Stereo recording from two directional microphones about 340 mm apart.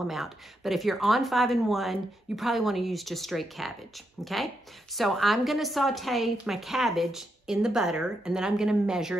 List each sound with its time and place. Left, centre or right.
0.0 s a woman's voice: centre